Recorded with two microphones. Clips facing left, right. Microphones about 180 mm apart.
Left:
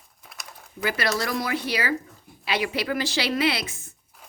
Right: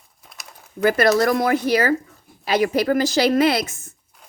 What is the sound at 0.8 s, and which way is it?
A woman's voice, 50° right (ahead or behind).